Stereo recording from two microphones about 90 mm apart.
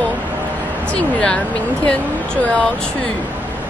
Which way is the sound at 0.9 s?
10° left (ahead or behind).